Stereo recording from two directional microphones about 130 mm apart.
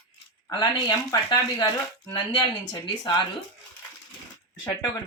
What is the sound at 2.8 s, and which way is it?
Speech, 35° left (ahead or behind).